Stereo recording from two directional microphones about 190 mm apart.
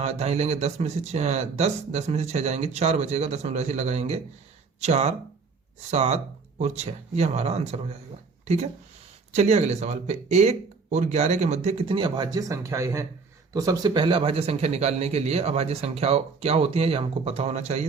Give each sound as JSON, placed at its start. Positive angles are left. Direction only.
{"t": 0.2, "sound": "a man's voice", "side_deg": -35}